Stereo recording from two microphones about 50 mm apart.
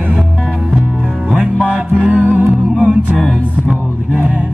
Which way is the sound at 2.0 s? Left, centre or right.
Right.